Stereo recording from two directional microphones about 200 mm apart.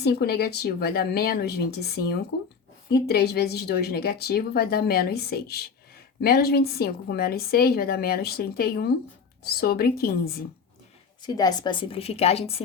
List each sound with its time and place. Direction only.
0.0 s speech: 50° left (ahead or behind)
11.2 s a woman's voice: 20° left (ahead or behind)